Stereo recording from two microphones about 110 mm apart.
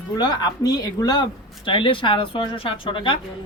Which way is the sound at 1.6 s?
50° left (ahead or behind).